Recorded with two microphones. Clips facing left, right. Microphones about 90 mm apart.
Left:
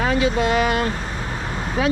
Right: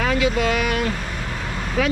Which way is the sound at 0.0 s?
25° left (ahead or behind).